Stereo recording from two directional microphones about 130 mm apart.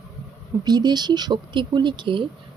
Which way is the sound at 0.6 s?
30° right (ahead or behind).